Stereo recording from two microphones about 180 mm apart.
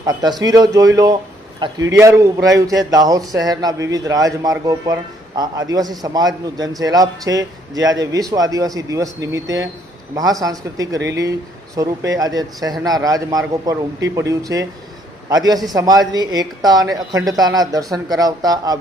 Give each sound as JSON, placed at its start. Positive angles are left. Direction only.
{"t": 0.0, "sound": "a man's voice", "side_deg": -20}